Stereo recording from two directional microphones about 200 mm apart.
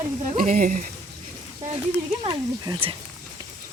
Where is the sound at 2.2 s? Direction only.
20° right (ahead or behind).